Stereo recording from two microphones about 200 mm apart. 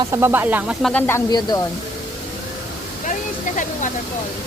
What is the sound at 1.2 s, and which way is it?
Speech, 20° left (ahead or behind).